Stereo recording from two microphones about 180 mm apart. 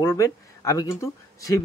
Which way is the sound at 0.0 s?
20° left (ahead or behind).